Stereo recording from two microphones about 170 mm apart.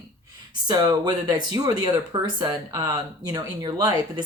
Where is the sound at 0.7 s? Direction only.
20° right (ahead or behind).